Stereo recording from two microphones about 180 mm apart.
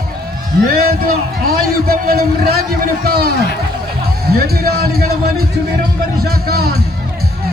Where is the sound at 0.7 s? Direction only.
55° right (ahead or behind).